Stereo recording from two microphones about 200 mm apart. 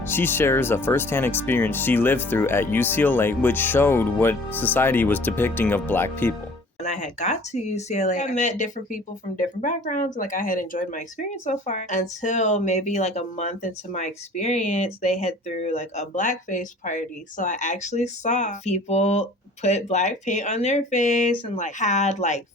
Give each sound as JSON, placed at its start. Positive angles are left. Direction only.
{"t": 0.0, "sound": "speech", "side_deg": 10}
{"t": 6.8, "sound": "speech", "side_deg": 35}